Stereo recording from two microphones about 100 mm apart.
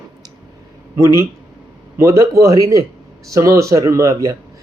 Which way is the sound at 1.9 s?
30° right (ahead or behind).